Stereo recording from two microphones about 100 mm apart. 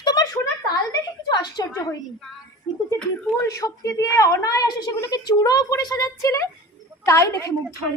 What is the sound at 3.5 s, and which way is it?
Speech, 35° left (ahead or behind).